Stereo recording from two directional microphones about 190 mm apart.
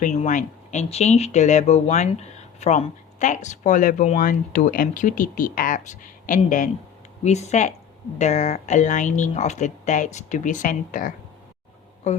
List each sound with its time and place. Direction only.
0.2 s speech: 40° left (ahead or behind)